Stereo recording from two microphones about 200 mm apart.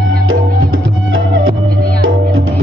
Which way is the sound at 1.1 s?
90° right.